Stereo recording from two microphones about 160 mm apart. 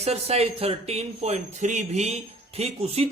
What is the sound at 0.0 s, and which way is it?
A man's voice, 40° right (ahead or behind).